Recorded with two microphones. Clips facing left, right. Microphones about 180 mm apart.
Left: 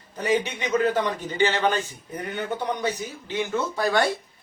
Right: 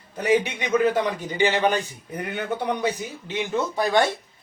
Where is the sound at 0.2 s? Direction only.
10° right (ahead or behind).